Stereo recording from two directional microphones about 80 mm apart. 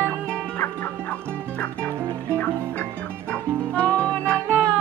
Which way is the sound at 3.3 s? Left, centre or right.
Centre.